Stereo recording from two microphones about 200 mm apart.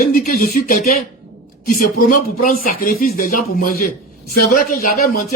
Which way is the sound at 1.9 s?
45° left (ahead or behind).